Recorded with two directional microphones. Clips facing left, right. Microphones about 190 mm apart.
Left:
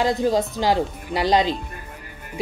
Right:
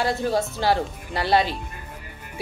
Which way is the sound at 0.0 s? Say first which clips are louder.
Left 3 dB; 15° left (ahead or behind).